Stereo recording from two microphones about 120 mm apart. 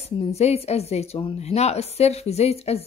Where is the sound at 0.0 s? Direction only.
60° left (ahead or behind).